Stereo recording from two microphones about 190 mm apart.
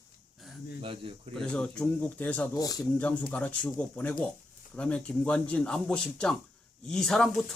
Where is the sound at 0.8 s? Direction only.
30° right (ahead or behind).